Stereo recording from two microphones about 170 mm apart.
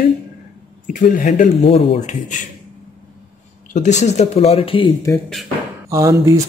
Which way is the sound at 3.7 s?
45° left (ahead or behind).